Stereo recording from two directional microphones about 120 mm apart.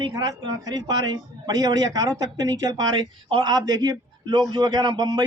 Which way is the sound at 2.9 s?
45° right (ahead or behind).